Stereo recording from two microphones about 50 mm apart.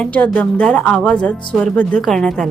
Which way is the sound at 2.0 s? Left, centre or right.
Centre.